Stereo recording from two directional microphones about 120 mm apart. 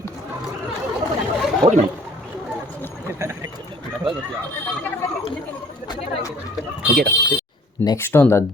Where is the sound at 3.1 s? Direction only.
25° right (ahead or behind).